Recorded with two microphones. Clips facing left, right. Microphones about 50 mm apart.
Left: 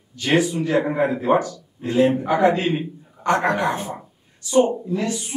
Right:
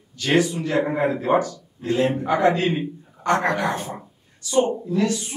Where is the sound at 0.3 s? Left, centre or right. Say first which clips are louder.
Left 1 dB; centre.